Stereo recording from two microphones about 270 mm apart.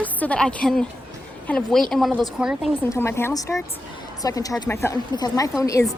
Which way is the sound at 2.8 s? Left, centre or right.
Centre.